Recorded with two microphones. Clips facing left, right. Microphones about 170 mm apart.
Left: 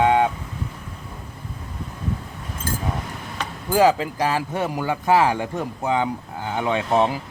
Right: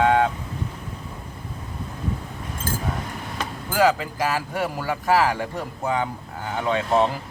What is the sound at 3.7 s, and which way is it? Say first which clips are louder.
Speech: left 3 dB; 20° left (ahead or behind).